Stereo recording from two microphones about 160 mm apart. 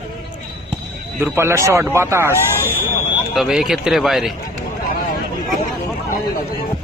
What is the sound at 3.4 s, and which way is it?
Speech, 5° right (ahead or behind).